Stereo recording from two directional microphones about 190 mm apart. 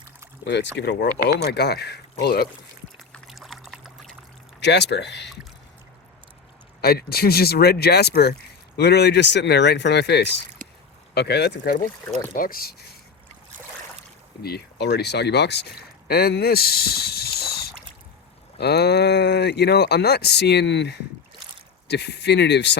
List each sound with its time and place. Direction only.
0.4 s speech: 65° left (ahead or behind)
3.0 s pour: centre (ahead or behind)
4.6 s speech: 65° left (ahead or behind)
6.8 s speech: 55° left (ahead or behind)
14.4 s speech: 55° left (ahead or behind)